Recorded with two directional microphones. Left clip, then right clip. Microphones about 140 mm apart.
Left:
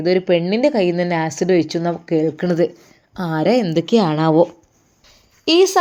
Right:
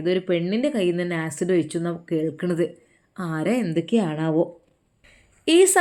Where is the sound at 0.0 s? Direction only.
15° left (ahead or behind).